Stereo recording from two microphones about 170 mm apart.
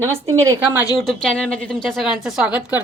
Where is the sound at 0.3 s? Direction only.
20° right (ahead or behind).